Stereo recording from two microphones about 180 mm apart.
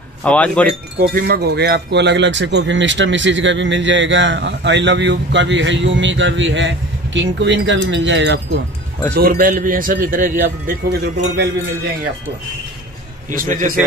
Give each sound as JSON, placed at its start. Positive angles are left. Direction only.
{"t": 0.2, "sound": "speech", "side_deg": 5}
{"t": 0.9, "sound": "speech", "side_deg": -55}
{"t": 9.1, "sound": "a man's voice", "side_deg": -55}
{"t": 13.3, "sound": "a man's voice", "side_deg": -50}